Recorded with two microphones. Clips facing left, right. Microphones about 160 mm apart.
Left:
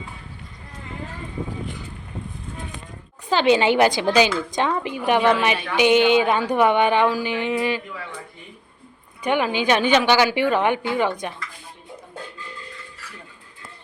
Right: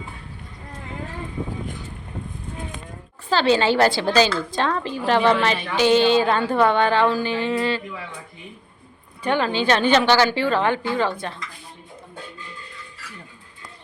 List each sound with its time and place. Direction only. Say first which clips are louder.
3.2 s a woman's voice: left 1 dB; 15° left (ahead or behind)
9.2 s a woman's voice: even; 15° left (ahead or behind)